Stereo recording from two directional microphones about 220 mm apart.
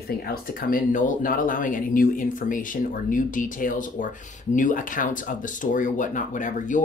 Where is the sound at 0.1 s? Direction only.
45° left (ahead or behind).